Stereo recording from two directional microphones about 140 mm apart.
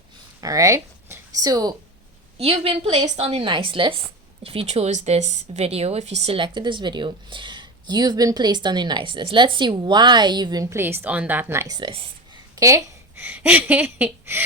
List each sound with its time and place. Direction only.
0.4 s speech: 25° right (ahead or behind)
2.4 s a woman's voice: 45° right (ahead or behind)
4.4 s a woman's voice: 50° right (ahead or behind); by 11.8 s 20° right (ahead or behind)
11.8 s a woman's voice: 40° right (ahead or behind)
12.5 s speech: 20° right (ahead or behind)